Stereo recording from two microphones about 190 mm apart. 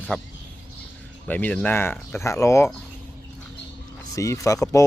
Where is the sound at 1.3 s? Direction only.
10° left (ahead or behind).